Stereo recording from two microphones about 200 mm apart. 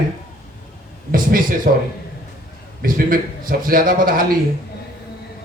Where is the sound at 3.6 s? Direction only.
45° right (ahead or behind).